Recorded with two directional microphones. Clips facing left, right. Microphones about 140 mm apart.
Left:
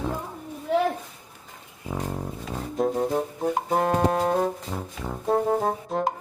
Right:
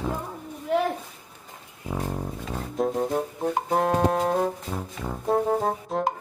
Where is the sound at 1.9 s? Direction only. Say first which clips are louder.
Right 1 dB; 5° left (ahead or behind).